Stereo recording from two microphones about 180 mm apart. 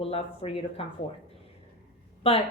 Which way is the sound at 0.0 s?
35° left (ahead or behind).